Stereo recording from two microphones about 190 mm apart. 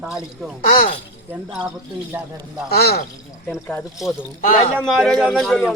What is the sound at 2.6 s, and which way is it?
Speech, 55° left (ahead or behind).